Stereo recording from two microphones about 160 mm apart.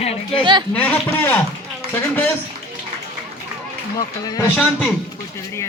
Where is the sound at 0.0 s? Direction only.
40° left (ahead or behind).